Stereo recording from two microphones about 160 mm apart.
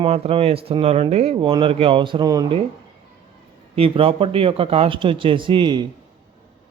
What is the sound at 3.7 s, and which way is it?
Speech, 35° right (ahead or behind).